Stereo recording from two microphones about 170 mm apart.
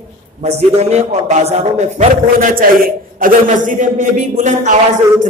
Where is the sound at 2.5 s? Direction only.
60° right (ahead or behind).